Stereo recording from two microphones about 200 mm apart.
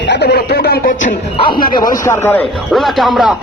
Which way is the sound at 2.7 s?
Centre (ahead or behind).